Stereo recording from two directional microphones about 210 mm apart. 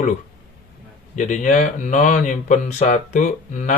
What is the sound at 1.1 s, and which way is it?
Speech, 35° left (ahead or behind).